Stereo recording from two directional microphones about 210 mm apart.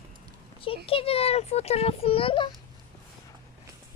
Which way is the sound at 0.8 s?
25° left (ahead or behind).